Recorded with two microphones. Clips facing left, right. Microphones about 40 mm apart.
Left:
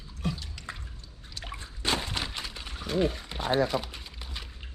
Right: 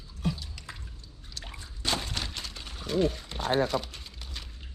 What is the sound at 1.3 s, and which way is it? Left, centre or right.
Drip, centre.